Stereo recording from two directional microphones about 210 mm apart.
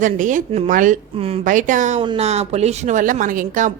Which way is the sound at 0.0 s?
35° right (ahead or behind).